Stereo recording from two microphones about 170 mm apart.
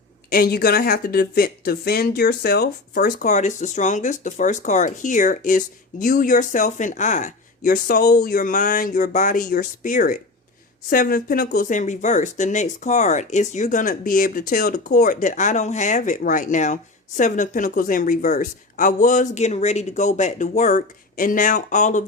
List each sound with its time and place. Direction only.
0.3 s speech: 65° left (ahead or behind); by 22.0 s 45° left (ahead or behind)